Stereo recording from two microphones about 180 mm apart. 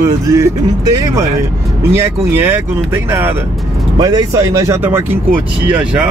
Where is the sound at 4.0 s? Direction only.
20° right (ahead or behind).